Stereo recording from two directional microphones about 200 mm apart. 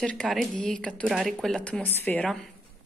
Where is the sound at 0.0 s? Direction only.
5° left (ahead or behind).